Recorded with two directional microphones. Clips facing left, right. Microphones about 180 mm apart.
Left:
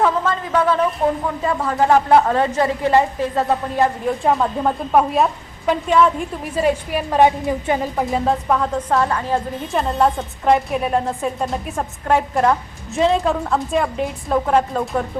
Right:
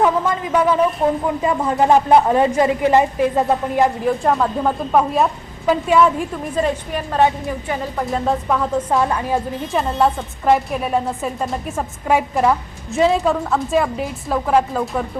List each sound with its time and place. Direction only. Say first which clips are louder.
0.0 s a woman's voice: right 1 dB; 15° right (ahead or behind)
4.2 s a woman's voice: left 3 dB; centre (ahead or behind)
6.6 s a woman's voice: left 2 dB; 10° left (ahead or behind)
8.1 s a woman's voice: even; centre (ahead or behind)
8.9 s a woman's voice: left 1 dB; 15° right (ahead or behind)
9.7 s a woman's voice: even; centre (ahead or behind)